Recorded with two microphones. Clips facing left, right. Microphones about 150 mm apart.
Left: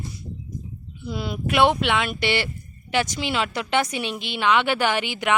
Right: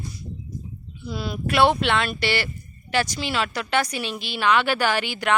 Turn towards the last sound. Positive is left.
turn(degrees=15)  # may be behind; listen again after turning